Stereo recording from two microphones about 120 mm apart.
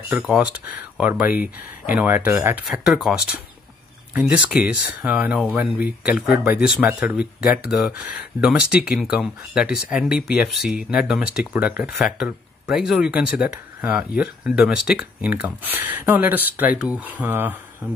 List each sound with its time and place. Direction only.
0.1 s speech: 5° right (ahead or behind)
2.7 s speech: centre (ahead or behind)